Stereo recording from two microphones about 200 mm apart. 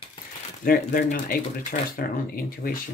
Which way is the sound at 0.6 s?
45° left (ahead or behind).